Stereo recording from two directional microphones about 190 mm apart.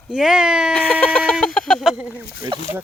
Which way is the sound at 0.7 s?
5° left (ahead or behind).